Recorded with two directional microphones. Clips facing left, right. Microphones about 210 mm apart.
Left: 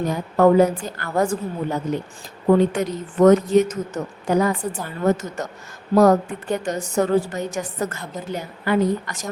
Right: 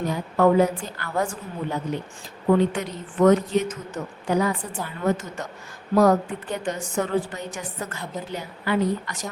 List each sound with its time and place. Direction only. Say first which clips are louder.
0.1 s a woman's voice: left 3 dB; 45° left (ahead or behind)